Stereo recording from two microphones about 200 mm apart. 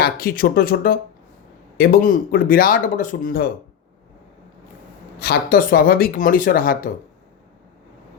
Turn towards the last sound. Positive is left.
turn(degrees=45)  # may be behind; listen again after turning